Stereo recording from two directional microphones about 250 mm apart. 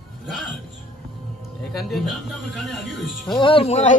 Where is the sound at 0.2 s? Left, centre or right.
Centre.